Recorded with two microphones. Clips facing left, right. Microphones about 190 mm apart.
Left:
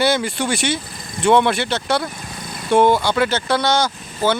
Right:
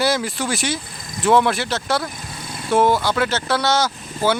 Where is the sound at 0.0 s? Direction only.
Centre (ahead or behind).